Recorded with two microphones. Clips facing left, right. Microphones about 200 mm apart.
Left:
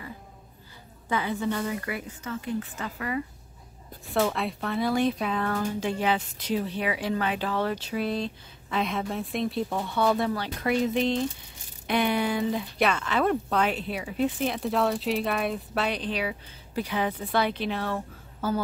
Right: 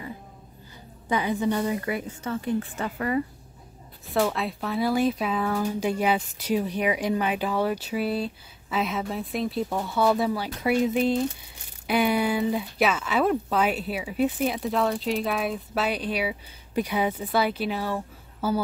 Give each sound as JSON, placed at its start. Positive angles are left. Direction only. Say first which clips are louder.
{"t": 1.0, "sound": "a woman's voice", "louder": "right 3 dB", "side_deg": -15}
{"t": 4.1, "sound": "speech", "louder": "right 1 dB", "side_deg": 0}